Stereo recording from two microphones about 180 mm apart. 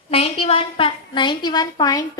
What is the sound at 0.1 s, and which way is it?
A woman's voice, 35° left (ahead or behind).